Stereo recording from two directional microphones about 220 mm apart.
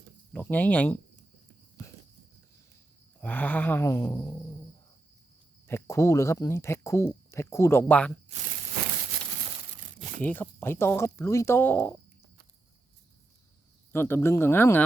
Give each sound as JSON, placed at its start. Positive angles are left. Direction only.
{"t": 0.3, "sound": "speech", "side_deg": 10}
{"t": 3.2, "sound": "speech", "side_deg": 5}
{"t": 5.6, "sound": "speech", "side_deg": 10}
{"t": 8.3, "sound": "tearing", "side_deg": -30}
{"t": 10.2, "sound": "speech", "side_deg": 10}
{"t": 13.9, "sound": "speech", "side_deg": 10}